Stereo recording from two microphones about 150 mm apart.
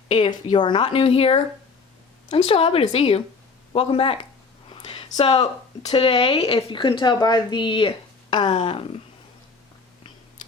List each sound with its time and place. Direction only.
0.1 s a woman's voice: 30° left (ahead or behind)
4.7 s a sound: 35° left (ahead or behind)
5.1 s a woman's voice: 40° left (ahead or behind)